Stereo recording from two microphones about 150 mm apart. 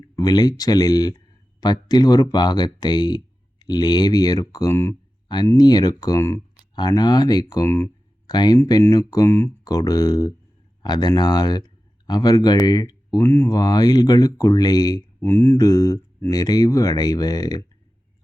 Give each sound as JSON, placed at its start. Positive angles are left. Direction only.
{"t": 0.2, "sound": "speech", "side_deg": 25}